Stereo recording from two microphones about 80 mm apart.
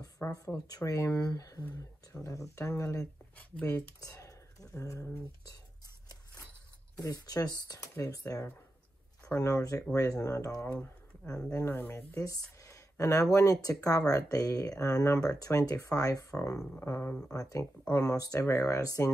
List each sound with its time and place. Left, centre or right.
0.2 s speech: left
0.7 s speech: left
7.0 s speech: left
11.5 s speech: left
12.3 s speech: left